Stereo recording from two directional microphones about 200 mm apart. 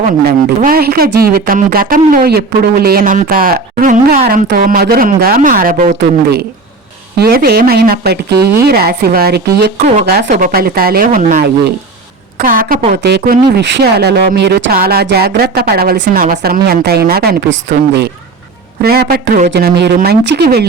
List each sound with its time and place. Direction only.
0.0 s speech: 45° right (ahead or behind)
7.2 s speech: 50° right (ahead or behind)
12.5 s speech: 45° right (ahead or behind)
12.9 s speech: 55° right (ahead or behind)
18.8 s speech: 50° right (ahead or behind)